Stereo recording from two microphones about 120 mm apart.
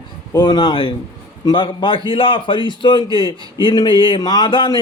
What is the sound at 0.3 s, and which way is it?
A man's voice, 40° left (ahead or behind).